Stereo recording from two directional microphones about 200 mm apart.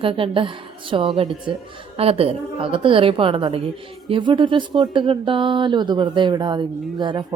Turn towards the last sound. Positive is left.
turn(degrees=-25)  # may be behind; listen again after turning